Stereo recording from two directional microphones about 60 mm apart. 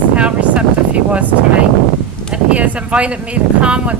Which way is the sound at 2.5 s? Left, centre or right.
Right.